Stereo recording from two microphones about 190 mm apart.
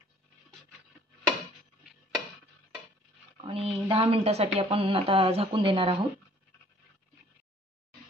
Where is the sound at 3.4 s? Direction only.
30° right (ahead or behind).